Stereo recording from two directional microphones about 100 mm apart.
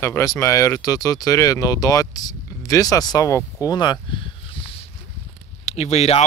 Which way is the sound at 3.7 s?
50° left (ahead or behind).